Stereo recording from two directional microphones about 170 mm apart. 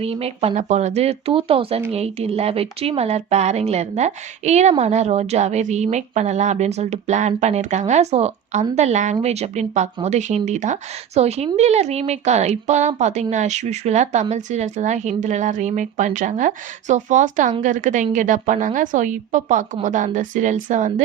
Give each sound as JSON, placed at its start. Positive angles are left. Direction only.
{"t": 0.0, "sound": "speech", "side_deg": -35}